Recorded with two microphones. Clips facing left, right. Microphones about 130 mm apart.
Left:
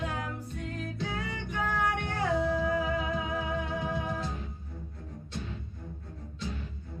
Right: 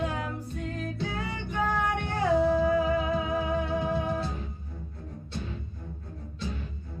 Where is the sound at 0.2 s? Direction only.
30° right (ahead or behind).